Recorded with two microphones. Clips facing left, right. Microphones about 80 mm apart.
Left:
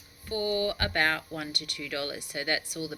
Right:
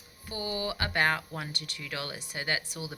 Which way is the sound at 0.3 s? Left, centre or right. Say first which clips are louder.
Left 5 dB; centre.